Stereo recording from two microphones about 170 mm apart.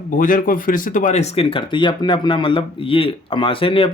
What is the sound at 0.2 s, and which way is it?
Speech, 55° left (ahead or behind).